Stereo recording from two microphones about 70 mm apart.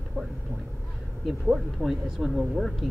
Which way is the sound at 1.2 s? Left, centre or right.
Centre.